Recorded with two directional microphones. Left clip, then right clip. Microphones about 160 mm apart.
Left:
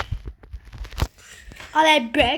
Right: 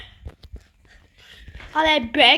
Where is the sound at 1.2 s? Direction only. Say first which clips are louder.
Left 2 dB; 10° left (ahead or behind).